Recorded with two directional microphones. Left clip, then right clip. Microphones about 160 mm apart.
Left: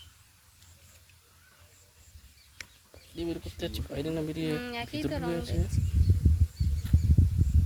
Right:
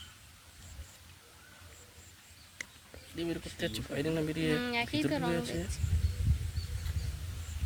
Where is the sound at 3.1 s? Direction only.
15° left (ahead or behind).